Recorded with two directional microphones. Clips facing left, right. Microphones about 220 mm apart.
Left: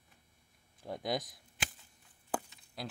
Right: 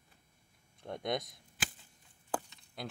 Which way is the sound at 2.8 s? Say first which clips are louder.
Even; centre (ahead or behind).